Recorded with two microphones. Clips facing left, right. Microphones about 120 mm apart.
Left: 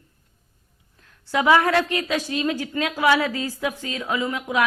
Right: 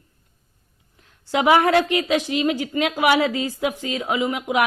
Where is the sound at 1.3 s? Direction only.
20° right (ahead or behind).